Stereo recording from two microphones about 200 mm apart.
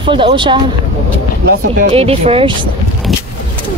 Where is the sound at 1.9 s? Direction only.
30° right (ahead or behind).